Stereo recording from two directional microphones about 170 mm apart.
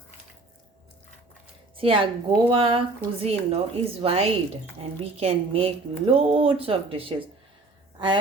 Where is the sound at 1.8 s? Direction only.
30° right (ahead or behind).